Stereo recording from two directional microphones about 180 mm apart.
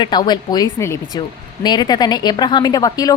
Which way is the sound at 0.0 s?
25° left (ahead or behind).